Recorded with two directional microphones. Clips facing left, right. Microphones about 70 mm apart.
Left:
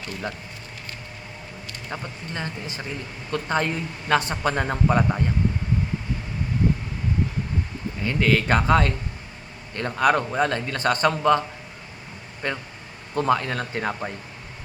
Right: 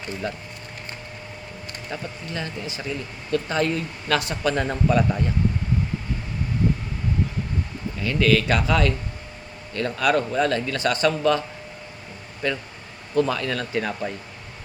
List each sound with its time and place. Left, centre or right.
1.9 s speech: left
8.0 s speech: left